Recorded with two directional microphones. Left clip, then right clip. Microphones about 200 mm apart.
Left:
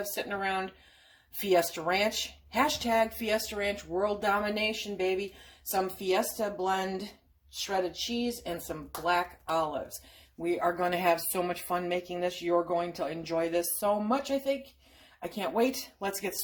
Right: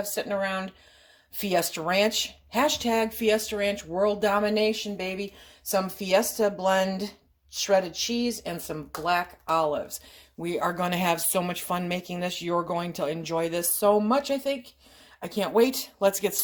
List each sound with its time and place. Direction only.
0.1 s speech: 45° right (ahead or behind)